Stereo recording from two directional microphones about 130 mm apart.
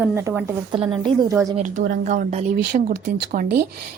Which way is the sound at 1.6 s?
80° right.